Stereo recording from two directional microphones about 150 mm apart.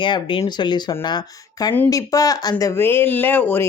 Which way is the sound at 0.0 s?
35° left (ahead or behind).